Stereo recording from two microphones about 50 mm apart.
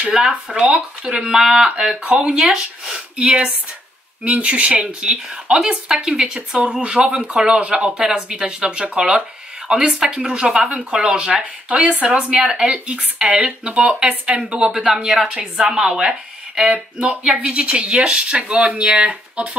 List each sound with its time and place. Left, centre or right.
0.3 s speech: right
2.3 s speech: centre
4.2 s speech: right
5.3 s speech: centre; by 7.2 s right
7.2 s speech: centre
16.7 s speech: right
17.2 s speech: centre